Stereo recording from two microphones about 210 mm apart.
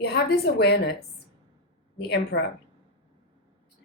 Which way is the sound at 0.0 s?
50° left (ahead or behind).